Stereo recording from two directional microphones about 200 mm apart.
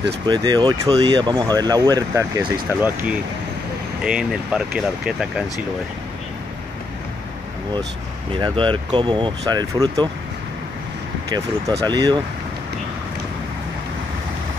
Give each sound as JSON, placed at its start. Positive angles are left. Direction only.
{"t": 0.3, "sound": "speech", "side_deg": -20}
{"t": 8.4, "sound": "speech", "side_deg": -25}
{"t": 11.3, "sound": "speech", "side_deg": -20}